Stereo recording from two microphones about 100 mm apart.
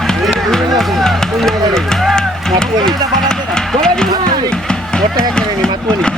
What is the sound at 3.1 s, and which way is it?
Music, 5° left (ahead or behind).